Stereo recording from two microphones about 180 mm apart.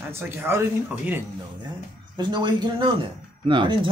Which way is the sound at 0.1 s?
15° right (ahead or behind).